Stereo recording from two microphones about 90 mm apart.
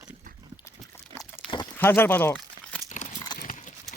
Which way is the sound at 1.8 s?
25° left (ahead or behind).